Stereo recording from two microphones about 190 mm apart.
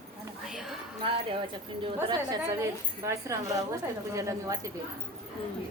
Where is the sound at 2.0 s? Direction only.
20° right (ahead or behind).